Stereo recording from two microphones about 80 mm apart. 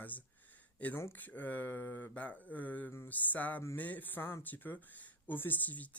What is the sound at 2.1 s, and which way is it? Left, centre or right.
Speech, centre.